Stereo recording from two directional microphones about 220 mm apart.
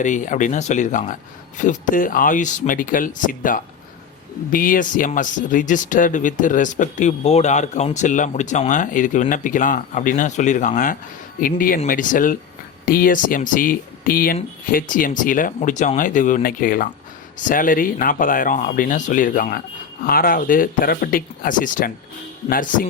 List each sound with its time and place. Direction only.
0.0 s speech: 35° left (ahead or behind)